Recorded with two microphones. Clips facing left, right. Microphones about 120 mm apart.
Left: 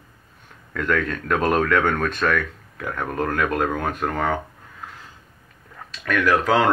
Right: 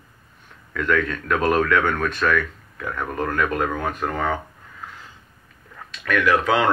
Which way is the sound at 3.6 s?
45° left (ahead or behind).